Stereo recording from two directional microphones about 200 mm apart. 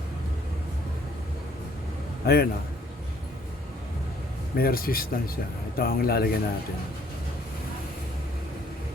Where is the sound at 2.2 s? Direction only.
50° left (ahead or behind).